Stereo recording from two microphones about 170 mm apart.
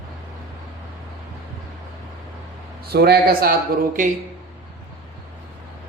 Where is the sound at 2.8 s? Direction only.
70° right (ahead or behind).